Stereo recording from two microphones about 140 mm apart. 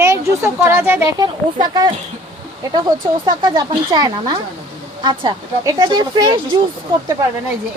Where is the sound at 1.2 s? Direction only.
30° right (ahead or behind).